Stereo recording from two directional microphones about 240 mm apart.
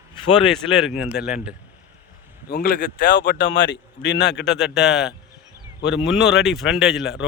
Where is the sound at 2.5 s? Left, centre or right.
Left.